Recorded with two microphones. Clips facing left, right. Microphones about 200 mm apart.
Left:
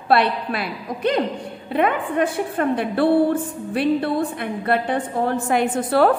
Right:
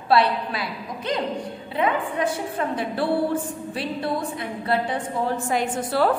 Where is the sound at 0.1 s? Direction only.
60° left (ahead or behind).